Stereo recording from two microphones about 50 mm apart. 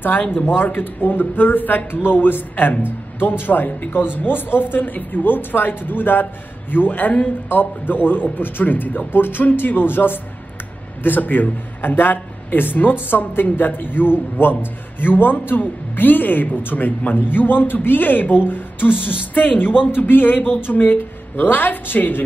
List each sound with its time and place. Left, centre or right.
0.0 s a man's voice: left